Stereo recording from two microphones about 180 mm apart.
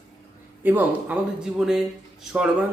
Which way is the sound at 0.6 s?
10° right (ahead or behind).